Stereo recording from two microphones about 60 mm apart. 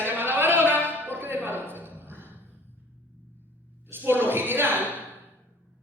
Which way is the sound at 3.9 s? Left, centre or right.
Right.